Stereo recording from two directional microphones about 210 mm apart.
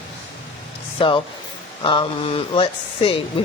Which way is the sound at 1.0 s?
25° left (ahead or behind).